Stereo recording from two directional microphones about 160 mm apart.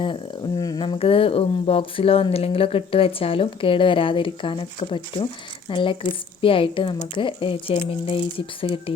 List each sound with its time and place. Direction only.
0.0 s speech: 25° left (ahead or behind)